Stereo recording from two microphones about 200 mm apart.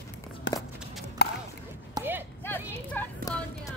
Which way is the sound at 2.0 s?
10° right (ahead or behind).